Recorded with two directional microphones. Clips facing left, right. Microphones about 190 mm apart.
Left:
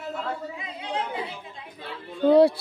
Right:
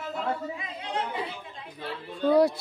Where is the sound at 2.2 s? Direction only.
25° left (ahead or behind).